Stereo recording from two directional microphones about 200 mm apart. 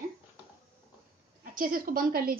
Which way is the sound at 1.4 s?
45° right (ahead or behind).